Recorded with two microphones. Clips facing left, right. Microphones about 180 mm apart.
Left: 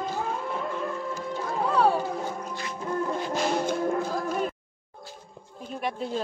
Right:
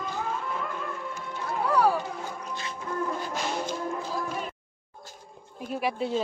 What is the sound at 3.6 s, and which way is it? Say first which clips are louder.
Music: left 6 dB; 55° left (ahead or behind).